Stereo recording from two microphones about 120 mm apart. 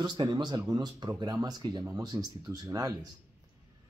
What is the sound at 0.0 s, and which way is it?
Speech, 40° right (ahead or behind).